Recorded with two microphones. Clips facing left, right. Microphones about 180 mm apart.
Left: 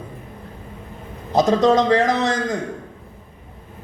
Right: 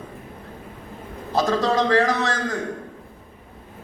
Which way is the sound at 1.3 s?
20° left (ahead or behind).